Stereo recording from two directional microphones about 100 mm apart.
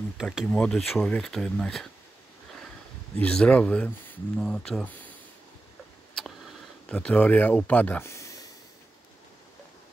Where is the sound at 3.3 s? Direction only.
10° left (ahead or behind).